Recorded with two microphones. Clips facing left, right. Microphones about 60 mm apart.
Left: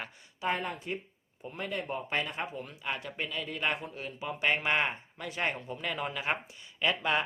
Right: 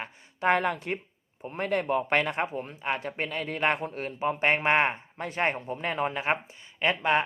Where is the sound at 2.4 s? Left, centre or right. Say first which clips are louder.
Right 6 dB; right.